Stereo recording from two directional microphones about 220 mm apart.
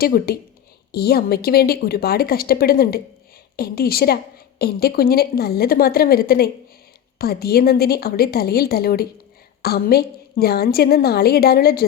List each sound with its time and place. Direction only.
0.0 s a woman's voice: 45° left (ahead or behind)